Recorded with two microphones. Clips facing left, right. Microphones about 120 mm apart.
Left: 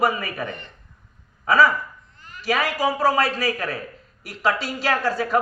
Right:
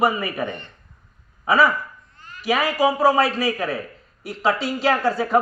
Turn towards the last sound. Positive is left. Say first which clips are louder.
# right 2 dB
turn(degrees=-20)  # may be behind; listen again after turning